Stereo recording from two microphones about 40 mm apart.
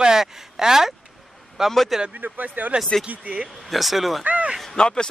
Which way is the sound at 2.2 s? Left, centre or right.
Right.